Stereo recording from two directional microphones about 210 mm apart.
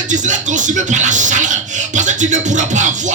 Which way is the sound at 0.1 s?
35° right (ahead or behind).